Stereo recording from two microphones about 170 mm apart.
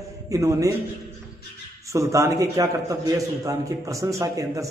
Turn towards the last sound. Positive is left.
turn(degrees=-20)  # may be behind; listen again after turning